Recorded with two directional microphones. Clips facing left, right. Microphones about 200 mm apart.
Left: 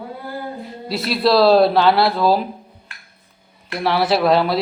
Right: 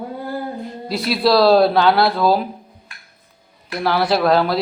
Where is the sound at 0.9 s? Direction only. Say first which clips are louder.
Even; centre (ahead or behind).